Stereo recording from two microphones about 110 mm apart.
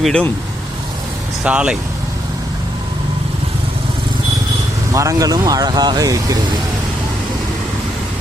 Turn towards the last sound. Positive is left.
turn(degrees=-30)  # may be behind; listen again after turning